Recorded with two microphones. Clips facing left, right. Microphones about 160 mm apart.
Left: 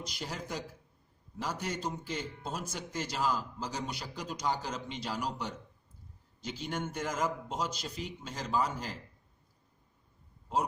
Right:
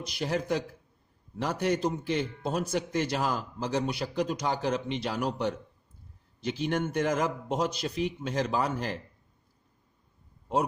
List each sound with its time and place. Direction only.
0.0 s a man's voice: 60° right (ahead or behind)